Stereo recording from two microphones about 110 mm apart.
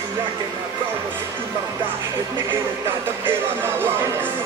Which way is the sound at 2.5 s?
20° right (ahead or behind).